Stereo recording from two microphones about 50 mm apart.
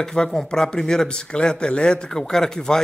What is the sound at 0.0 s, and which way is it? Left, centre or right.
Speech, centre.